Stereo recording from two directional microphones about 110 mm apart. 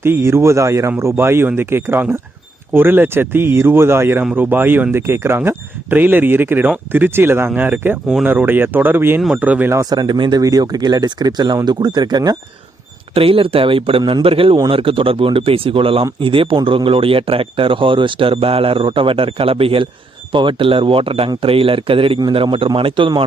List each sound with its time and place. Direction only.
0.0 s speech: 20° right (ahead or behind)
9.7 s speech: 35° right (ahead or behind)
13.1 s speech: 55° right (ahead or behind)